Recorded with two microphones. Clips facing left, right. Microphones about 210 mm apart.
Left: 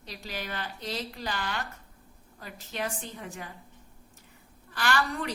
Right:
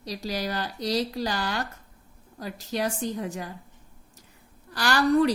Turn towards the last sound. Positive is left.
turn(degrees=-35)  # may be behind; listen again after turning